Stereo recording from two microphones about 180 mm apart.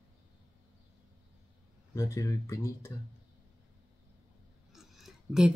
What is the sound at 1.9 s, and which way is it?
Speech, 20° left (ahead or behind).